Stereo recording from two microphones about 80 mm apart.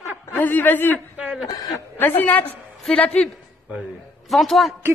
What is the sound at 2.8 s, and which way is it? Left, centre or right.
Speech, centre.